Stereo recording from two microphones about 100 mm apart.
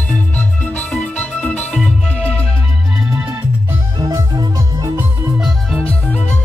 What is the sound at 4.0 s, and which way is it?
Music, 40° right (ahead or behind).